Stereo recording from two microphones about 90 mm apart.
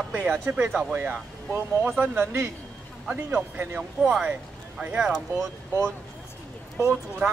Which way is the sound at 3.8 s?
5° right (ahead or behind).